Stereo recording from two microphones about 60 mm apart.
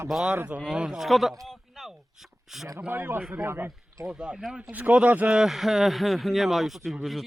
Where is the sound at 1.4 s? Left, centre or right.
Centre.